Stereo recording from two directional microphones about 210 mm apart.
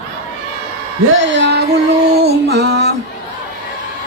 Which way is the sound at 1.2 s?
55° right (ahead or behind).